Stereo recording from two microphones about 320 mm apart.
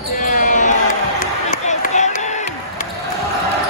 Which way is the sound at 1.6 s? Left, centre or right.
Left.